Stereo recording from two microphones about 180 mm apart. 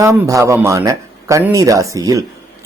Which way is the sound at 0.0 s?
15° right (ahead or behind).